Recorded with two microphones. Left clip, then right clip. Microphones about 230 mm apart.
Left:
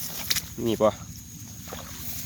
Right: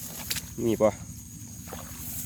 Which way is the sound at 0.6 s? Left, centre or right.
Centre.